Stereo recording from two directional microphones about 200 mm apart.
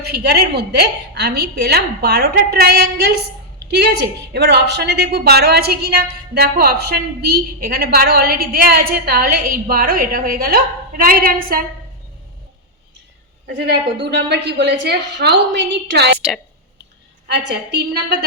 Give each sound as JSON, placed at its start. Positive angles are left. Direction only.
{"t": 0.0, "sound": "a woman's voice", "side_deg": -55}
{"t": 13.6, "sound": "a woman's voice", "side_deg": -55}
{"t": 17.3, "sound": "a woman's voice", "side_deg": -55}